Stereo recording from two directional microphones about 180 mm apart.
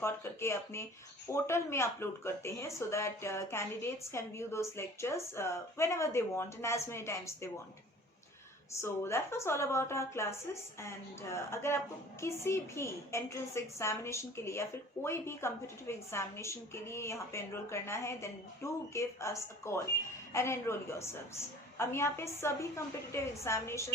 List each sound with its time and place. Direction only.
0.0 s a woman's voice: 15° left (ahead or behind)
8.8 s a woman's voice: 15° left (ahead or behind)